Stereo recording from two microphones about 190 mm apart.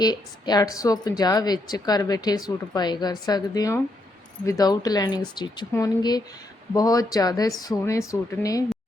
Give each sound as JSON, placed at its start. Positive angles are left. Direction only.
{"t": 0.0, "sound": "a woman's voice", "side_deg": 20}